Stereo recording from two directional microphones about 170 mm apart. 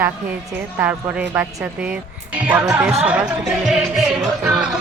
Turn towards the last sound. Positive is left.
turn(degrees=-5)  # may be behind; listen again after turning